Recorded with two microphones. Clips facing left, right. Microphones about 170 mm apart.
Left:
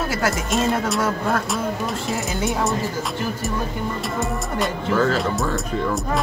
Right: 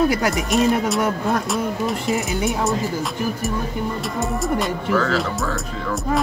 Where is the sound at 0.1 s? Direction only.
15° right (ahead or behind).